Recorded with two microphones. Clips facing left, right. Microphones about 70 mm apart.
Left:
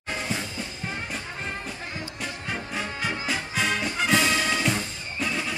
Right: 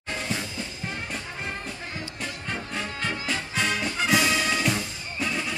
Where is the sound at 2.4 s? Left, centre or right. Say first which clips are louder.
Left 1 dB; centre.